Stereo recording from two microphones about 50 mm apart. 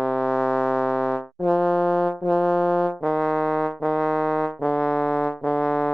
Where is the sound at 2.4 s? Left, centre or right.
Centre.